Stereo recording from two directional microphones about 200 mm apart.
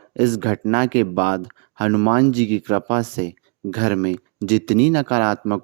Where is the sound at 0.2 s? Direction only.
40° right (ahead or behind).